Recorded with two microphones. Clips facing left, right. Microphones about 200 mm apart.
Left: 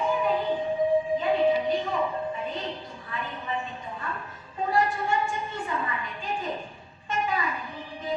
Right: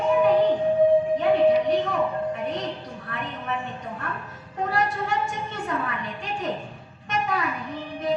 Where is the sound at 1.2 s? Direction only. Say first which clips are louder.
Right 4 dB; 70° right (ahead or behind).